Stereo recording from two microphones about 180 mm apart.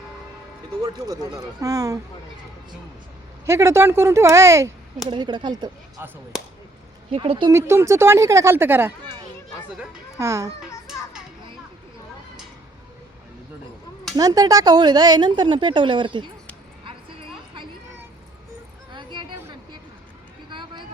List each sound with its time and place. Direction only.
0.8 s a woman's voice: 20° right (ahead or behind)
3.4 s a woman's voice: 15° right (ahead or behind)
6.0 s a woman's voice: 10° right (ahead or behind)
7.1 s a woman's voice: 30° right (ahead or behind)
7.5 s a woman's voice: 15° right (ahead or behind)
10.2 s a woman's voice: 15° right (ahead or behind)
14.2 s a woman's voice: 20° right (ahead or behind)
18.9 s a sound: 25° right (ahead or behind)
20.5 s run: 25° right (ahead or behind)